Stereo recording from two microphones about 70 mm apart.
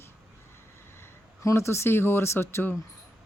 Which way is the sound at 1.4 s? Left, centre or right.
Left.